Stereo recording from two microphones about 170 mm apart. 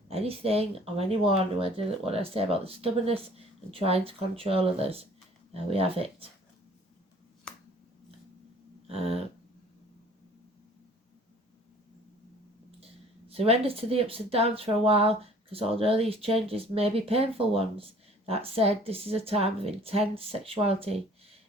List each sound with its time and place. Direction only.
0.1 s speech: 35° right (ahead or behind)
8.9 s speech: 35° right (ahead or behind)
12.8 s speech: 35° right (ahead or behind)